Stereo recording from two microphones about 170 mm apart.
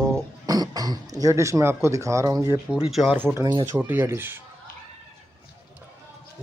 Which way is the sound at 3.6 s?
15° right (ahead or behind).